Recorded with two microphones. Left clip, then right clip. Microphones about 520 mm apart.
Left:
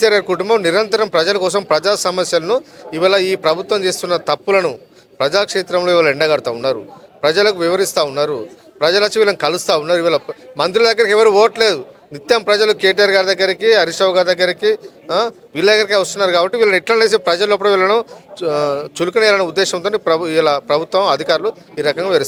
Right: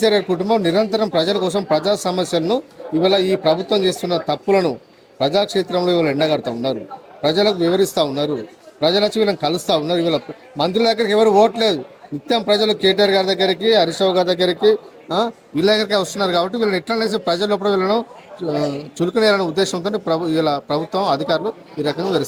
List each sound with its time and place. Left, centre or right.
0.0 s speech: left